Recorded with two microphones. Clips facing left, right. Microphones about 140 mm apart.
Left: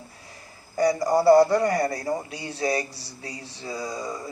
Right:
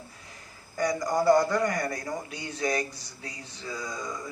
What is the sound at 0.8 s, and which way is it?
A man's voice, 35° left (ahead or behind).